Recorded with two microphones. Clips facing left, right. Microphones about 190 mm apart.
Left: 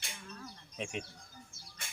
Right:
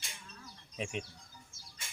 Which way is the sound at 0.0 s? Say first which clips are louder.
Left 5 dB; 60° left (ahead or behind).